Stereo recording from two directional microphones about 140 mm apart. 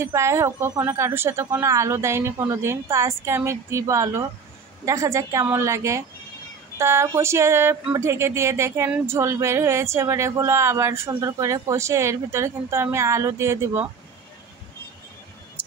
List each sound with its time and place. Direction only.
0.0 s speech: 20° right (ahead or behind)